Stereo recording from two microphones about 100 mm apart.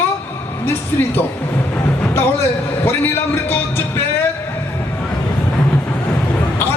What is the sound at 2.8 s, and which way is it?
Speech, 20° left (ahead or behind).